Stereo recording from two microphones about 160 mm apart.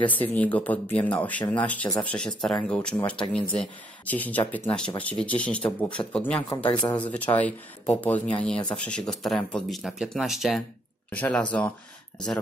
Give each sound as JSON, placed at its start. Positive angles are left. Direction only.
{"t": 0.0, "sound": "speech", "side_deg": 10}
{"t": 6.6, "sound": "speech", "side_deg": 25}
{"t": 7.0, "sound": "speech", "side_deg": 10}